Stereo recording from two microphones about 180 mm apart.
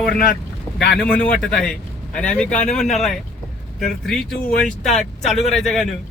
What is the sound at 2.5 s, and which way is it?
Speech, 40° left (ahead or behind).